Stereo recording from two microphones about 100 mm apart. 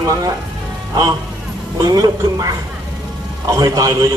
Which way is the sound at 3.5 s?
40° right (ahead or behind).